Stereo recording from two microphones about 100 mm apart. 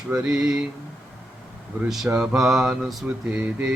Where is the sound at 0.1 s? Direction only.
5° right (ahead or behind).